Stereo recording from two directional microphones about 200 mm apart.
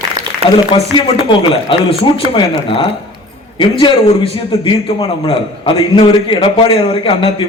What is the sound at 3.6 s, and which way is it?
A man's voice, 25° left (ahead or behind).